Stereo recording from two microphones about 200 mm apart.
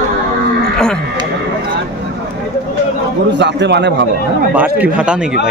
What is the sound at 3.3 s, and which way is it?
Speech, 60° right (ahead or behind).